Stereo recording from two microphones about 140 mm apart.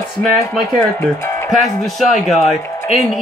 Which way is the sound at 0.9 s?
20° left (ahead or behind).